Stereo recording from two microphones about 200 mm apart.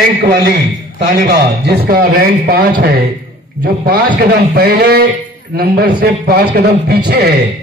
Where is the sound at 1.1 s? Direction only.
45° right (ahead or behind).